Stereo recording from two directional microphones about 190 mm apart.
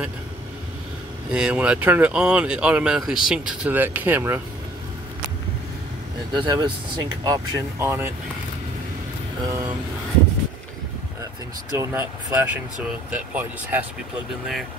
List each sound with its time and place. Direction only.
1.3 s speech: 5° right (ahead or behind)
6.3 s speech: 25° right (ahead or behind)
11.7 s speech: 15° right (ahead or behind)